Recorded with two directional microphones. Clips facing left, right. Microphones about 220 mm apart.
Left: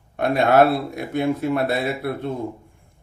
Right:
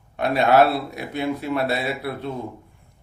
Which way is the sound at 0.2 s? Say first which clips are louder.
Left 1 dB; 50° left (ahead or behind).